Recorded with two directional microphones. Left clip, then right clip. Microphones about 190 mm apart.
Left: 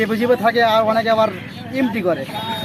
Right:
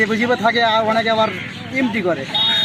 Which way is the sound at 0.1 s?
25° left (ahead or behind).